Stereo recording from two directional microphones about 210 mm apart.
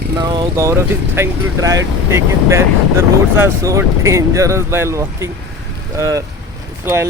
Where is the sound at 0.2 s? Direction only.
20° right (ahead or behind).